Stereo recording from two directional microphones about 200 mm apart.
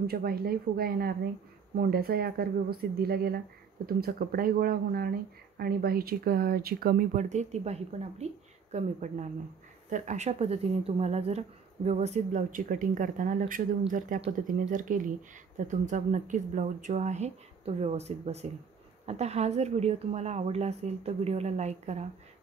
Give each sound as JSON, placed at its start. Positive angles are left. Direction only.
{"t": 0.0, "sound": "speech", "side_deg": -50}